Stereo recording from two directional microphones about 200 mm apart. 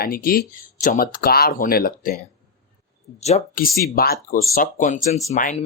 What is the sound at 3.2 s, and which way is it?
Speech, 35° left (ahead or behind).